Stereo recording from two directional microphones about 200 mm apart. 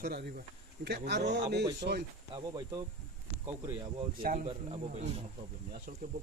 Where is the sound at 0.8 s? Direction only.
55° right (ahead or behind).